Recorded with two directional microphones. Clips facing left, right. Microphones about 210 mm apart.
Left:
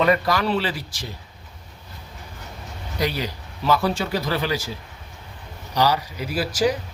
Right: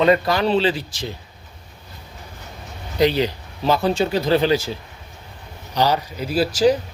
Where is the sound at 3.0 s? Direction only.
25° right (ahead or behind).